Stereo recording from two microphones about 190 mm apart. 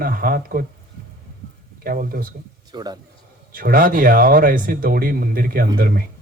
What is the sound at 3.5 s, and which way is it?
Speech, 50° right (ahead or behind).